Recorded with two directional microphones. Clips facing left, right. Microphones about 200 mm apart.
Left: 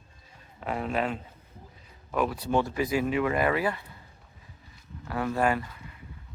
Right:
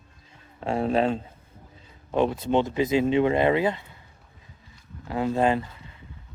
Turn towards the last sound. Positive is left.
turn(degrees=-25)  # may be behind; listen again after turning